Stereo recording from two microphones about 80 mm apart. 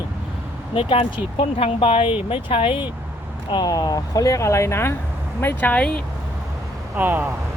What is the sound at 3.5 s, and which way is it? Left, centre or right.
Speech, left.